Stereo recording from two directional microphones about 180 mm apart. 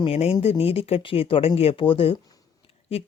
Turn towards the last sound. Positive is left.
turn(degrees=35)  # may be behind; listen again after turning